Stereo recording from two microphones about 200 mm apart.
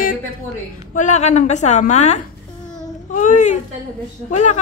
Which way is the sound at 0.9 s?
35° left (ahead or behind).